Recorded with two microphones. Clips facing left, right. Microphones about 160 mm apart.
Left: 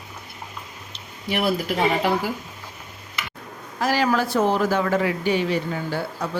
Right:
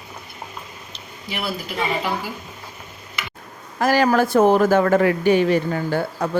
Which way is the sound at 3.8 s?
50° right (ahead or behind).